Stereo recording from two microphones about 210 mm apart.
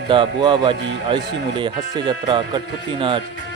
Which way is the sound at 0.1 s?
25° right (ahead or behind).